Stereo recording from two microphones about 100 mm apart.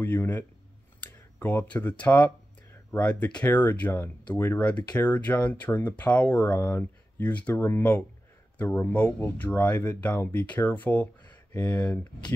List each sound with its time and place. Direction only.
0.0 s a man's voice: 20° left (ahead or behind)
1.0 s a sound: 15° left (ahead or behind)
3.1 s speech: 10° left (ahead or behind)